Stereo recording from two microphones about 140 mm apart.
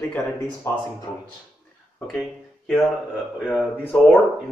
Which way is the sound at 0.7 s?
20° left (ahead or behind).